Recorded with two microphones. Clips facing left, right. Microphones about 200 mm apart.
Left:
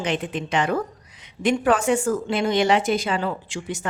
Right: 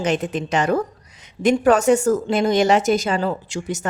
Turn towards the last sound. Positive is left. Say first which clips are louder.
# right 4 dB
turn(degrees=-40)  # may be behind; listen again after turning